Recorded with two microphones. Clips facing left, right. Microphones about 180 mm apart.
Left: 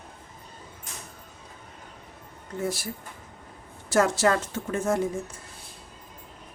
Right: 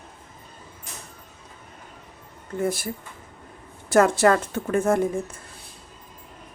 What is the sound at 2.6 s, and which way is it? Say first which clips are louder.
Speech: right 4 dB; 55° right (ahead or behind).